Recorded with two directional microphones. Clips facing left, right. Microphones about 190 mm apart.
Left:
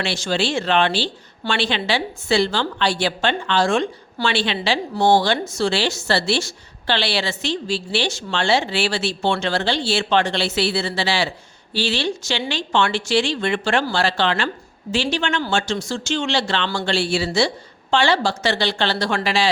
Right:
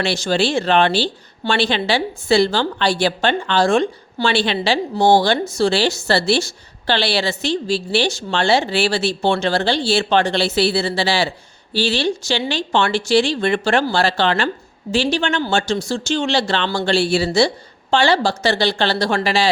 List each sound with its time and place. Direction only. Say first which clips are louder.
0.0 s a woman's voice: right 4 dB; 40° right (ahead or behind)